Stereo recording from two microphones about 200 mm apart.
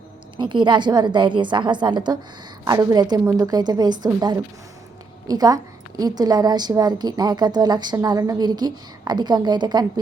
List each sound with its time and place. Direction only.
0.3 s a woman's voice: 25° right (ahead or behind)